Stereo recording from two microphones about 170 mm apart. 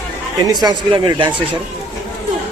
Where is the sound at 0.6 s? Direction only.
30° right (ahead or behind).